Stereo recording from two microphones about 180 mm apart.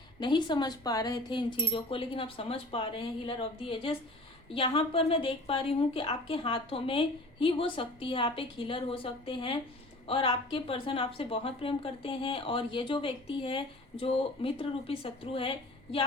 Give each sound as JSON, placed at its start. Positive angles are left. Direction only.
{"t": 0.2, "sound": "a woman's voice", "side_deg": 25}
{"t": 4.5, "sound": "a woman's voice", "side_deg": 30}